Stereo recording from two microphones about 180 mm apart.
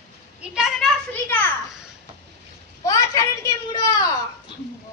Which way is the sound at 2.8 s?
20° left (ahead or behind).